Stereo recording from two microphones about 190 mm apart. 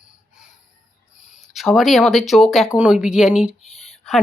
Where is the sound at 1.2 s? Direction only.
Centre (ahead or behind).